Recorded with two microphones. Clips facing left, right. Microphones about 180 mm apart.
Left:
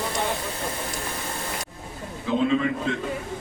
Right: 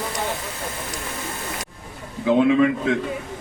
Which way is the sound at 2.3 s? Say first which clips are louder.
Right 6 dB; 75° right (ahead or behind).